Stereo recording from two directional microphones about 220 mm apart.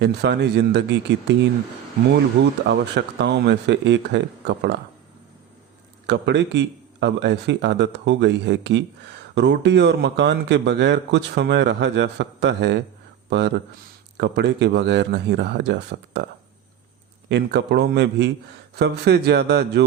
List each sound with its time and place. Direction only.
0.0 s speech: 50° right (ahead or behind)
2.0 s speech: 50° right (ahead or behind)
6.1 s speech: 50° right (ahead or behind)
14.2 s speech: 50° right (ahead or behind)
17.2 s speech: 50° right (ahead or behind)